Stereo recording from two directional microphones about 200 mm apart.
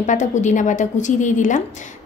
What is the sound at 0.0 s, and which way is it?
A woman's voice, 40° left (ahead or behind).